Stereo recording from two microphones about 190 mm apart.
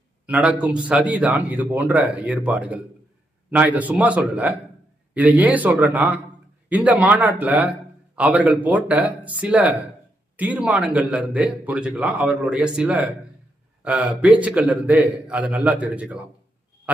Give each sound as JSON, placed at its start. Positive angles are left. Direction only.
{"t": 0.3, "sound": "a man's voice", "side_deg": -5}